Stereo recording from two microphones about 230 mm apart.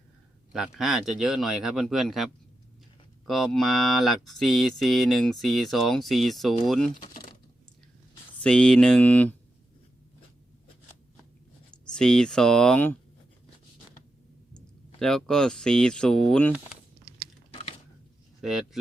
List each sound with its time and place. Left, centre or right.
0.5 s speech: centre
8.4 s speech: centre
11.9 s speech: centre
14.5 s speech: centre
17.5 s a sound: left
18.4 s speech: centre